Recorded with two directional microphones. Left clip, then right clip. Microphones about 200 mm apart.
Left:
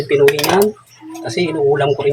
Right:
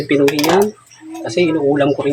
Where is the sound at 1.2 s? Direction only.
25° right (ahead or behind).